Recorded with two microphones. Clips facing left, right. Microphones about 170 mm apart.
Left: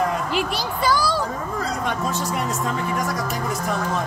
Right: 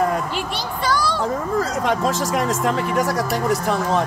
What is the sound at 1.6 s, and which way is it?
Speech, 90° right.